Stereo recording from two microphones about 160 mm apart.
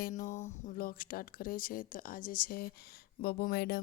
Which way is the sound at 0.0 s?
50° left (ahead or behind).